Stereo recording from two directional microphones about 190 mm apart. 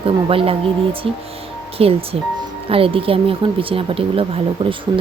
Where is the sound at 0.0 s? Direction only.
30° right (ahead or behind).